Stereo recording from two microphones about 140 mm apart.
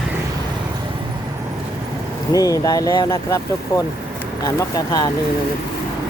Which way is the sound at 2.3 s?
25° left (ahead or behind).